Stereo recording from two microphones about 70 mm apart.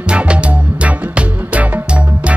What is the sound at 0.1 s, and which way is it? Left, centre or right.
Music, centre.